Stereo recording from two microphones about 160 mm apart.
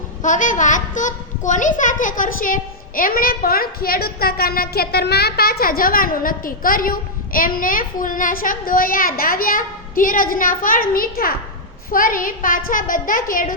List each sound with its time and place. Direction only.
0.2 s a child's voice: 50° left (ahead or behind)